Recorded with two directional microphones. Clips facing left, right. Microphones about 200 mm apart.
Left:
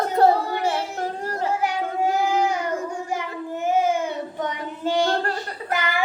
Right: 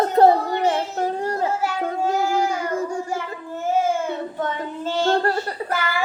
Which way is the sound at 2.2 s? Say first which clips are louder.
Even; 20° left (ahead or behind).